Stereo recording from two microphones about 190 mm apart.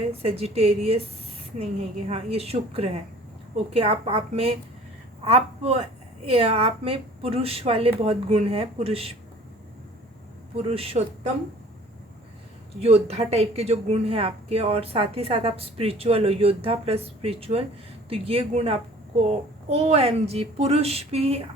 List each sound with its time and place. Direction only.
0.2 s speech: 30° right (ahead or behind)
10.5 s speech: 30° right (ahead or behind)
12.8 s speech: 30° right (ahead or behind)